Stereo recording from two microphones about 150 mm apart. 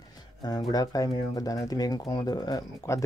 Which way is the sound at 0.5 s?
25° left (ahead or behind).